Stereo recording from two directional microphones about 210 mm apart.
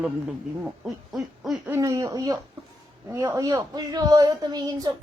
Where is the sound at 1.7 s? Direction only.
15° right (ahead or behind).